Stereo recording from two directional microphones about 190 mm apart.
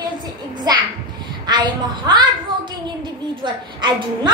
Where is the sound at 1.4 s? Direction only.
25° right (ahead or behind).